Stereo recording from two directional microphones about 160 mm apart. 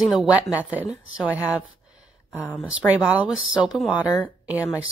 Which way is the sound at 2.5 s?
5° right (ahead or behind).